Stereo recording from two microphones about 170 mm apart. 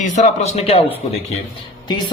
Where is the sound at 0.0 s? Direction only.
40° left (ahead or behind).